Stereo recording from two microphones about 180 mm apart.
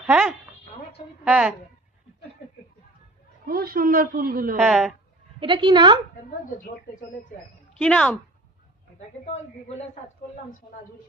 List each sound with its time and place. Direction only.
0.0 s a woman's voice: 5° right (ahead or behind)
3.4 s a woman's voice: 55° right (ahead or behind)
4.5 s a woman's voice: centre (ahead or behind)
5.4 s a woman's voice: 25° right (ahead or behind)
7.7 s a woman's voice: 5° left (ahead or behind)
9.2 s a man's voice: 35° left (ahead or behind)